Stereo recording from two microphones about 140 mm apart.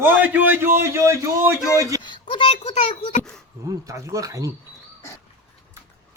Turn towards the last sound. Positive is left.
turn(degrees=-25)  # may be behind; listen again after turning